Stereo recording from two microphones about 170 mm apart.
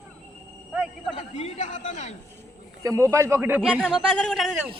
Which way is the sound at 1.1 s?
40° left (ahead or behind).